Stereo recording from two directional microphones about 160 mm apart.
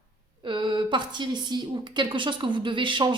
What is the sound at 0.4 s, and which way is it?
Speech, 30° right (ahead or behind).